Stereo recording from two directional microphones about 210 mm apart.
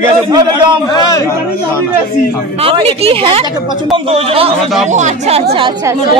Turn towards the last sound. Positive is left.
turn(degrees=-30)  # may be behind; listen again after turning